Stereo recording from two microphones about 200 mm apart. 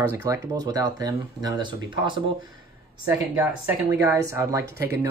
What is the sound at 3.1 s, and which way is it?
Speech, 5° right (ahead or behind).